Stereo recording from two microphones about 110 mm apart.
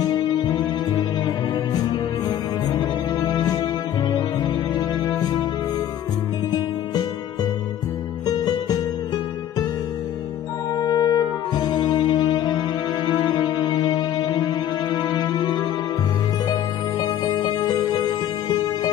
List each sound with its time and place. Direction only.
0.0 s music: 40° left (ahead or behind)
6.5 s music: 40° left (ahead or behind)
10.7 s music: 40° left (ahead or behind)
17.2 s music: 40° left (ahead or behind)